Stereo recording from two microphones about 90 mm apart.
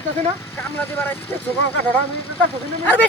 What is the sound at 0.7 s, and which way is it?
Speech, 20° left (ahead or behind).